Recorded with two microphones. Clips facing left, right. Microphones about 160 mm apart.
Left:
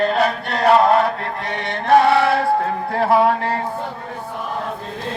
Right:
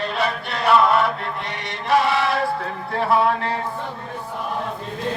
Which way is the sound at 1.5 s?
55° left (ahead or behind).